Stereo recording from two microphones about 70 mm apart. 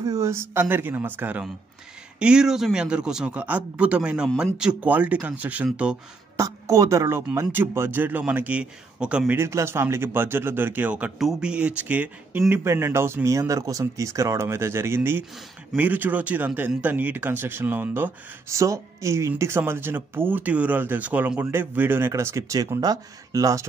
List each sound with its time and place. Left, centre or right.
0.0 s speech: right
0.3 s speech: right
2.1 s speech: centre
3.3 s speech: right
6.3 s speech: right
7.3 s speech: right
8.0 s speech: right
9.5 s speech: right
15.7 s speech: right
18.5 s speech: right
22.8 s speech: right